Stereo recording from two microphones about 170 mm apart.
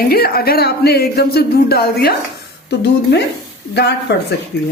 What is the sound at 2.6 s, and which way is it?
A woman's voice, 90° left.